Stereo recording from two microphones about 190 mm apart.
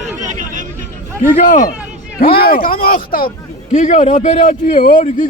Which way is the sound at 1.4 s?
45° left (ahead or behind).